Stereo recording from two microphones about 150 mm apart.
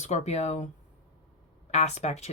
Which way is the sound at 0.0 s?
50° left (ahead or behind).